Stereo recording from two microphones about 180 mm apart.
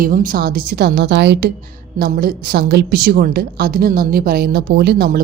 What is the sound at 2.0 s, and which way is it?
A woman's voice, 55° right (ahead or behind).